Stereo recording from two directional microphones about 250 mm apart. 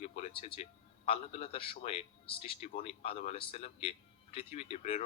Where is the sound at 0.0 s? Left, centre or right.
Left.